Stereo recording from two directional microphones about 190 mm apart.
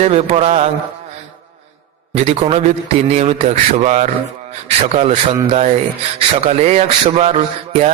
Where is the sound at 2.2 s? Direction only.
35° right (ahead or behind).